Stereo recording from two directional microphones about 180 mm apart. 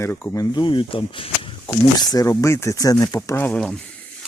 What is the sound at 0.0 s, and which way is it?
Speech, 15° left (ahead or behind).